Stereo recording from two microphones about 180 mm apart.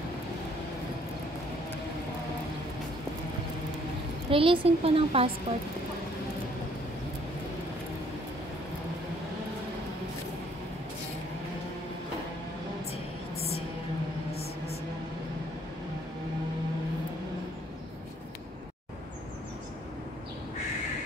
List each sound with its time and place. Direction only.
4.3 s a woman's voice: 30° right (ahead or behind)